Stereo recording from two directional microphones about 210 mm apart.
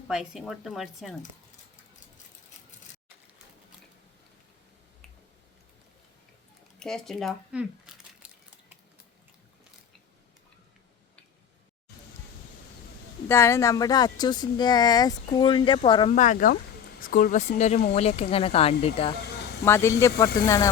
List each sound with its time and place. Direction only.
0.1 s a woman's voice: centre (ahead or behind)
6.7 s speech: centre (ahead or behind)
13.2 s speech: 10° left (ahead or behind)
16.1 s speech: 35° left (ahead or behind)
19.6 s speech: 10° left (ahead or behind)